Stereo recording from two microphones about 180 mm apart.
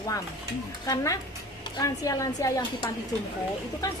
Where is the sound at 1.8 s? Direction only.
20° left (ahead or behind).